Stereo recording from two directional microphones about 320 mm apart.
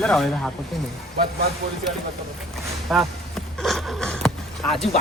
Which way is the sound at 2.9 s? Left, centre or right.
Centre.